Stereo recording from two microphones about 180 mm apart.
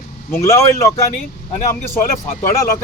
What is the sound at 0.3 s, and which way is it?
Speech, 15° left (ahead or behind).